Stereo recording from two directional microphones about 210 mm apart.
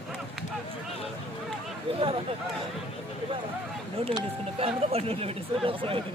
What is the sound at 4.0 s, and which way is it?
Speech, 25° right (ahead or behind).